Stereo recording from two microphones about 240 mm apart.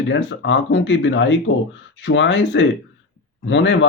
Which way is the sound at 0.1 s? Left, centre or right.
Left.